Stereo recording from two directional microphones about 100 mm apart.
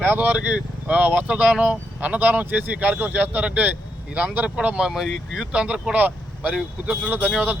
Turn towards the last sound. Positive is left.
turn(degrees=-15)  # may be behind; listen again after turning